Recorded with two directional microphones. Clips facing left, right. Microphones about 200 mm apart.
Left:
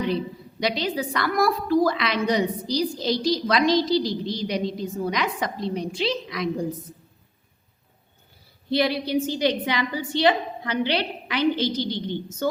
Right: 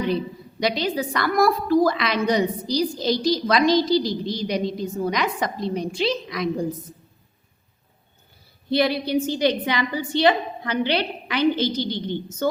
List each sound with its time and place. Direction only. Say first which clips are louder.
0.6 s a woman's voice: right 2 dB; 45° right (ahead or behind)
8.7 s a woman's voice: right 2 dB; 50° right (ahead or behind)